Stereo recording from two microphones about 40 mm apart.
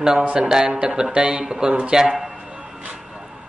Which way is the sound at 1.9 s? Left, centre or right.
Centre.